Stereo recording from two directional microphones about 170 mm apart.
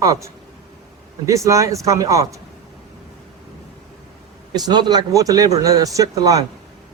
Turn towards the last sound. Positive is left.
turn(degrees=-20)  # may be behind; listen again after turning